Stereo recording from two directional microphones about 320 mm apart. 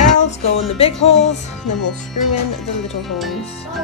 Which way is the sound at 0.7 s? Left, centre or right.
Centre.